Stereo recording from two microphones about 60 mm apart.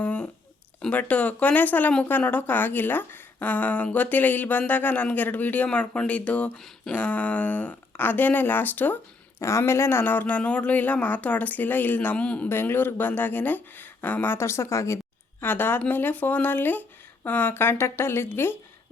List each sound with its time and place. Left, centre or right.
0.0 s a sound: left
0.9 s a woman's voice: left
9.4 s speech: left
12.1 s speech: centre
12.5 s a woman's voice: left
14.3 s speech: left
15.4 s a woman's voice: left